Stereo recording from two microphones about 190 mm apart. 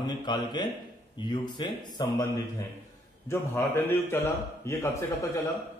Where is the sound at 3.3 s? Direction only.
10° left (ahead or behind).